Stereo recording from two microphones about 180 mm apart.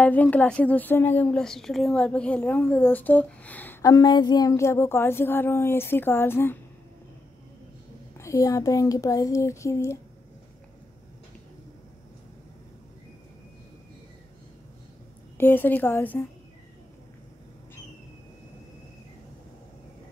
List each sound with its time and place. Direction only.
0.0 s a woman's voice: 10° left (ahead or behind)
3.9 s a woman's voice: 25° left (ahead or behind)
8.2 s a woman's voice: 20° left (ahead or behind)
15.3 s a woman's voice: 10° left (ahead or behind)